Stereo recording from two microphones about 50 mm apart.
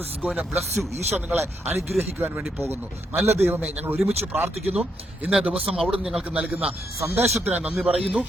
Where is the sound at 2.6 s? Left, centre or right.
Right.